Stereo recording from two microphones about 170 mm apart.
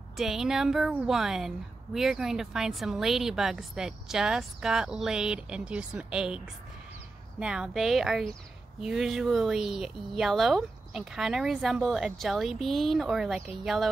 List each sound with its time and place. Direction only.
0.2 s speech: 5° right (ahead or behind)